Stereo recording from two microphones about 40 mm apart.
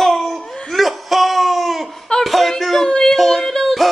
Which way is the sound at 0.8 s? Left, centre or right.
Centre.